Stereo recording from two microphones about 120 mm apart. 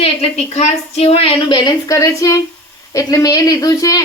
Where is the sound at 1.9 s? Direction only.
25° left (ahead or behind).